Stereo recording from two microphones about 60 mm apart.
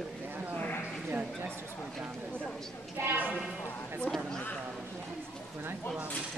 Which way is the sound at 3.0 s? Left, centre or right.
Right.